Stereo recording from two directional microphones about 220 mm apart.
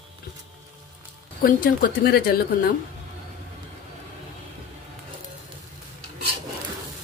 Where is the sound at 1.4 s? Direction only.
40° left (ahead or behind).